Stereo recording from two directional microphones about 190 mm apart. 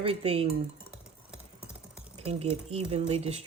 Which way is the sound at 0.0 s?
30° right (ahead or behind).